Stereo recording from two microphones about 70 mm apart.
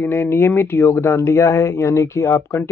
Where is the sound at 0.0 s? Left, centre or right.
Left.